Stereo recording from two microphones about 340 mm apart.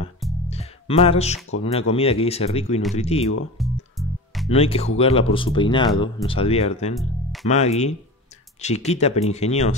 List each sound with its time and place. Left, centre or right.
0.5 s music: centre
1.6 s speech: centre
3.6 s music: centre
4.5 s speech: centre